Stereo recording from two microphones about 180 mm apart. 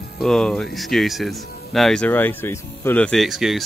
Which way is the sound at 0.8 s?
Centre (ahead or behind).